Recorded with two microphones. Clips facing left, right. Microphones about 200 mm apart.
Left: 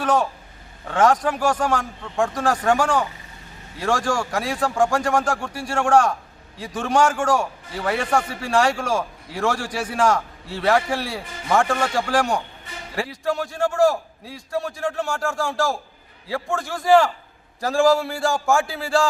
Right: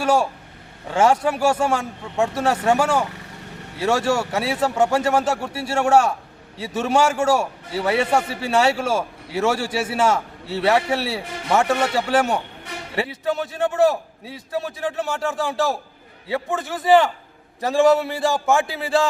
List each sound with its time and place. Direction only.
0.0 s a man's voice: 10° right (ahead or behind)
3.1 s vehicle: 70° right (ahead or behind)
3.8 s a man's voice: 5° right (ahead or behind)